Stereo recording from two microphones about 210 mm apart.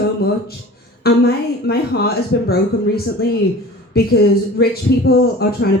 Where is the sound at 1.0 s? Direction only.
50° left (ahead or behind).